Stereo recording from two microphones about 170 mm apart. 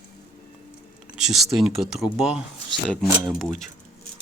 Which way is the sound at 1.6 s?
5° right (ahead or behind).